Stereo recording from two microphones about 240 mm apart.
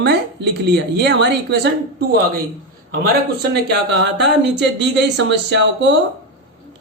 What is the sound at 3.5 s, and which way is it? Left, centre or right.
Speech, right.